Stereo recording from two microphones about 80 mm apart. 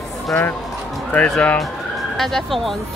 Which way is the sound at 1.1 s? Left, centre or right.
Centre.